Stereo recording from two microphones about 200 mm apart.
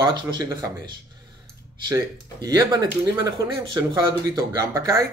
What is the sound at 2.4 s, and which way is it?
Speech, 20° right (ahead or behind).